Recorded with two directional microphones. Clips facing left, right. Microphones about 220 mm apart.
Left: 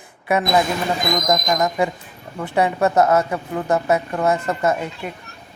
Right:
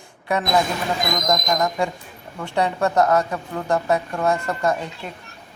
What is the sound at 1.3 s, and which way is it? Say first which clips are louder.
Speech: left 1 dB; 20° left (ahead or behind).